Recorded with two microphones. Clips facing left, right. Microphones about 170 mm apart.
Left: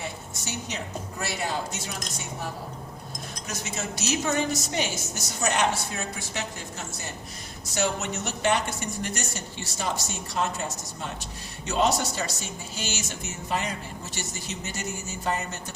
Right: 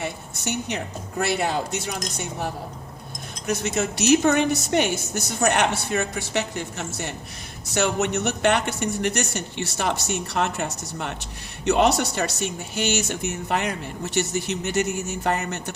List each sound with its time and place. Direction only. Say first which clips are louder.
0.0 s a sound: right 6 dB; 65° right (ahead or behind)
1.2 s a woman's voice: right 7 dB; 60° right (ahead or behind)
3.4 s a woman's voice: right 10 dB; 65° right (ahead or behind)